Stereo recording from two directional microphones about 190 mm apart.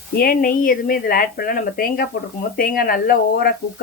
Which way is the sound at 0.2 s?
50° left (ahead or behind).